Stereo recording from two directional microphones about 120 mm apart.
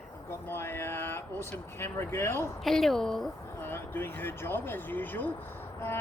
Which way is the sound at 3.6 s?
15° left (ahead or behind).